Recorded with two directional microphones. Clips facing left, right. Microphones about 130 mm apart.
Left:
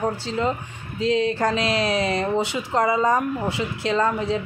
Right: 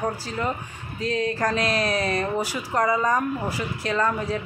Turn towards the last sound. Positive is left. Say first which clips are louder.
# left 3 dB
turn(degrees=25)  # may be behind; listen again after turning